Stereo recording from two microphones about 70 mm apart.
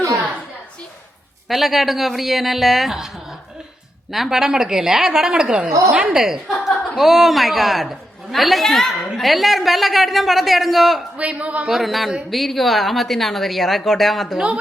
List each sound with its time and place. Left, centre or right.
1.5 s a woman's voice: centre
4.1 s a woman's voice: centre
11.2 s a woman's voice: centre
11.7 s a woman's voice: centre
14.3 s a woman's voice: centre